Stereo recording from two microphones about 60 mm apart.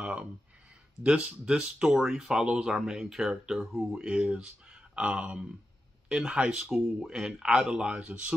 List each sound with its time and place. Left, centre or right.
0.0 s a sound: centre
1.0 s speech: centre
6.6 s speech: centre
7.1 s speech: centre